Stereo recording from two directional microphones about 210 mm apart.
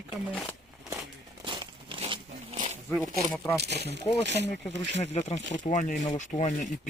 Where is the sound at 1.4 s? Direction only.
25° right (ahead or behind).